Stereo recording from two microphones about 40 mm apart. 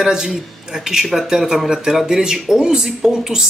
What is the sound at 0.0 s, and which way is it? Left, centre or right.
Speech, centre.